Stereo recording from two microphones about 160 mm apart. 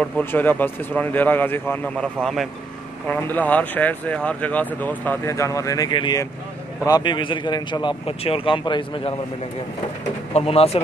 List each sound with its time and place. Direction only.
0.0 s speech: 10° left (ahead or behind)
3.1 s speech: 10° left (ahead or behind); by 9.1 s 30° left (ahead or behind)
10.3 s speech: 40° left (ahead or behind)